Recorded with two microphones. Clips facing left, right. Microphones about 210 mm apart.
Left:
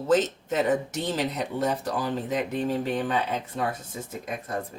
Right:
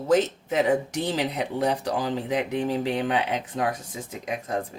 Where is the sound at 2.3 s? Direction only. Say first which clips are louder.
Right 2 dB; 70° right (ahead or behind).